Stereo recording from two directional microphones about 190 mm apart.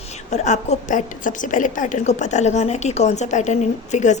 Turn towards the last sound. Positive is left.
turn(degrees=40)  # may be behind; listen again after turning